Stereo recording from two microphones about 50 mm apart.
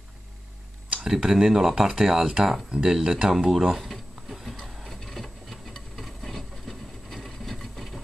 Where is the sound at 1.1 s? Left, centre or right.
Centre.